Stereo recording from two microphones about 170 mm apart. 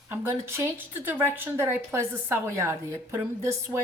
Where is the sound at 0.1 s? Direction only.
15° right (ahead or behind).